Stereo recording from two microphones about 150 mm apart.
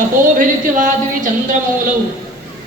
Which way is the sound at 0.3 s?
65° right (ahead or behind).